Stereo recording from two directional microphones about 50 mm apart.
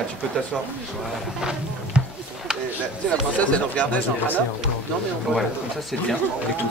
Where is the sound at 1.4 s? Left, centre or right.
Centre.